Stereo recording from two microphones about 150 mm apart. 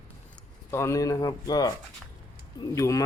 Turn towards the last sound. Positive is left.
turn(degrees=20)  # may be behind; listen again after turning